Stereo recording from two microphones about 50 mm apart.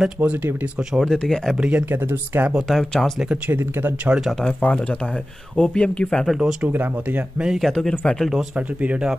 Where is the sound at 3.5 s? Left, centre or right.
Right.